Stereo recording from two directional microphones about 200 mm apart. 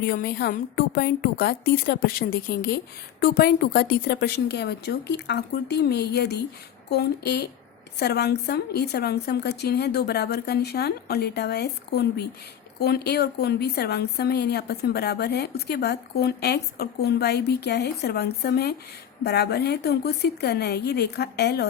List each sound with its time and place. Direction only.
0.0 s a woman's voice: 50° left (ahead or behind)